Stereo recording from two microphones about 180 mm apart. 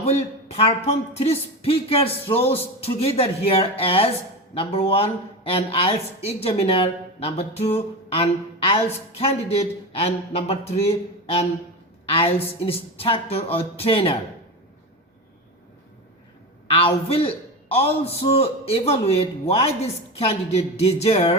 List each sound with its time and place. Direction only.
0.0 s speech: 35° left (ahead or behind)
16.6 s speech: 30° left (ahead or behind)